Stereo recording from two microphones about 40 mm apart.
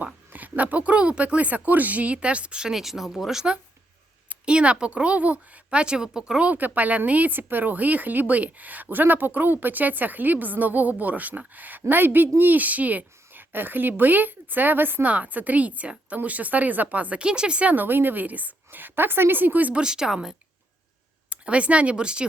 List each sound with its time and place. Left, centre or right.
0.3 s speech: right
2.7 s speech: centre
4.4 s a woman's voice: right
5.8 s a woman's voice: right
6.4 s speech: right
15.0 s speech: right
17.2 s a woman's voice: right
17.7 s a woman's voice: right
19.7 s speech: centre
21.2 s speech: right